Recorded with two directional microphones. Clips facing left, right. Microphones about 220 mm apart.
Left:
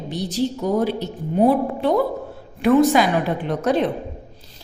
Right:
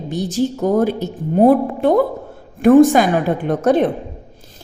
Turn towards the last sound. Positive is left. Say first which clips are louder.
# right 5 dB
turn(degrees=-50)  # may be behind; listen again after turning